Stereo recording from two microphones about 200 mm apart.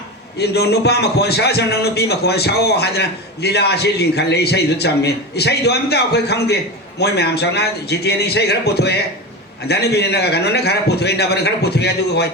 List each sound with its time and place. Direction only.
0.3 s a man's voice: 55° left (ahead or behind)